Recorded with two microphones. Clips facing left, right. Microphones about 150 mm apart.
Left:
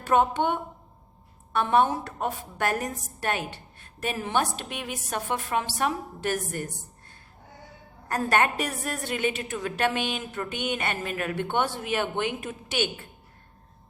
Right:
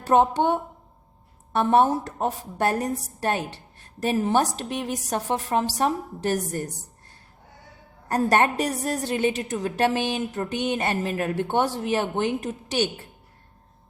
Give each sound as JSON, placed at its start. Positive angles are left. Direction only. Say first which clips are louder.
{"t": 0.0, "sound": "a woman's voice", "louder": "right 3 dB", "side_deg": -35}
{"t": 8.0, "sound": "a woman's voice", "louder": "right 4 dB", "side_deg": -35}